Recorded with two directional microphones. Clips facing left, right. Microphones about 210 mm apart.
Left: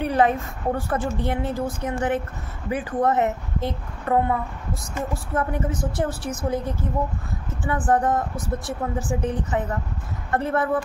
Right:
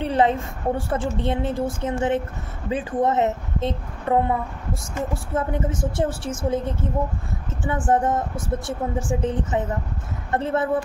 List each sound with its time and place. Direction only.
0.0 s a woman's voice: 25° right (ahead or behind)